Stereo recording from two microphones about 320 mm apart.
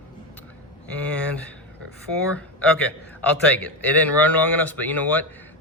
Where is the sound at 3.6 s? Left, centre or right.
Centre.